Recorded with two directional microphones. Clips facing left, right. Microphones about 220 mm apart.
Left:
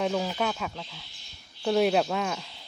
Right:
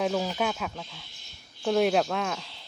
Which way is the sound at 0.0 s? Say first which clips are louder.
Even; centre (ahead or behind).